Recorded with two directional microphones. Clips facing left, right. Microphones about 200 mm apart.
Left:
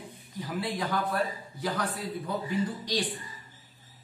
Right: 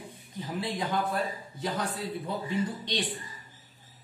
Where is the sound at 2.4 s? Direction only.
25° right (ahead or behind).